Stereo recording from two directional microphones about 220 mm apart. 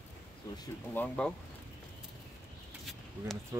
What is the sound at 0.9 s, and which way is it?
Speech, 5° left (ahead or behind).